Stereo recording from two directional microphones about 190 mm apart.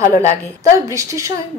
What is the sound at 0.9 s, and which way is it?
Speech, 15° right (ahead or behind).